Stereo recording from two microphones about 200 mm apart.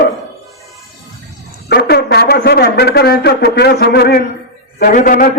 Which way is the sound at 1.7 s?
55° left (ahead or behind).